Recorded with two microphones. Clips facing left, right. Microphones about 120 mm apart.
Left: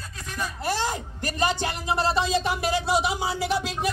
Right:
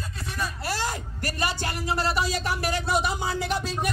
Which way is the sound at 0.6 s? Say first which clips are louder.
Left 6 dB; 20° left (ahead or behind).